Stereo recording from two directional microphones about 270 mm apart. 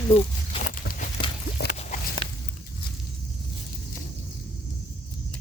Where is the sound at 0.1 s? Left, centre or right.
Left.